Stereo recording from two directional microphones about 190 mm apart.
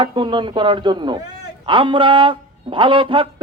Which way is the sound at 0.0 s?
25° right (ahead or behind).